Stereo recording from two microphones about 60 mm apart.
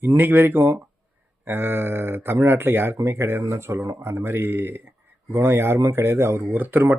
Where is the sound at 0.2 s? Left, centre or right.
Right.